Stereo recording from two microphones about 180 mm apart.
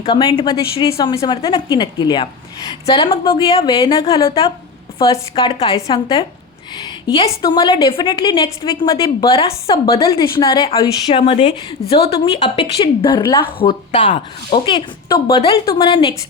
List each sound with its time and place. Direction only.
0.0 s a woman's voice: 25° left (ahead or behind)